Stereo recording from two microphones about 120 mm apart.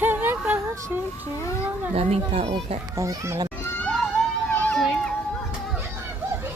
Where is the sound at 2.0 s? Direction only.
60° right (ahead or behind).